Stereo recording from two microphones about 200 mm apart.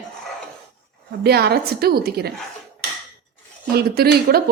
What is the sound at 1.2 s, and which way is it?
A woman's voice, 55° right (ahead or behind).